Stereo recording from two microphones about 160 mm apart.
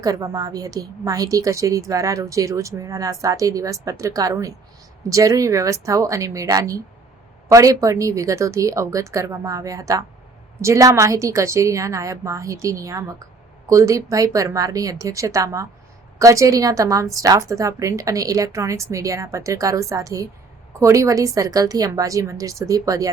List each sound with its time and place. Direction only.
0.0 s a woman's voice: 20° right (ahead or behind)